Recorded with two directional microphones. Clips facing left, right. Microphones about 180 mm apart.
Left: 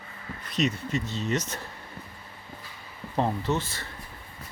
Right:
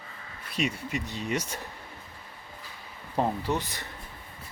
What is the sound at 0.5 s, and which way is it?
Speech, 10° right (ahead or behind).